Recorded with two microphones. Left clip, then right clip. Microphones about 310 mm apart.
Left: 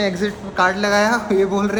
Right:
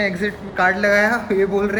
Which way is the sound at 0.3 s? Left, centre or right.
Centre.